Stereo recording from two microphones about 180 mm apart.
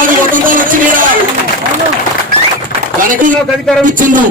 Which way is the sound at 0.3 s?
50° right (ahead or behind).